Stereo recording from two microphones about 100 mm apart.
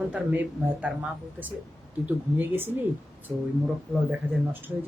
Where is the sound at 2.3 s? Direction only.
20° right (ahead or behind).